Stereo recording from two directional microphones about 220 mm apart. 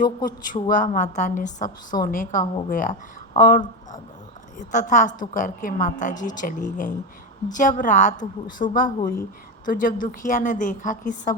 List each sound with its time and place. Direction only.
0.4 s a woman's voice: 35° left (ahead or behind)
4.7 s a woman's voice: 35° left (ahead or behind)